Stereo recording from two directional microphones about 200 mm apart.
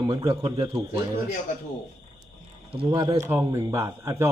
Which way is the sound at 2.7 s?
25° right (ahead or behind).